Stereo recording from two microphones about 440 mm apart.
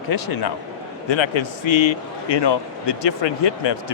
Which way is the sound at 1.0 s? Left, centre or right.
Left.